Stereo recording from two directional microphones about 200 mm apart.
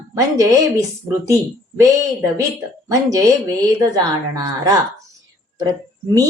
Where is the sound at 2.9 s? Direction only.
15° right (ahead or behind).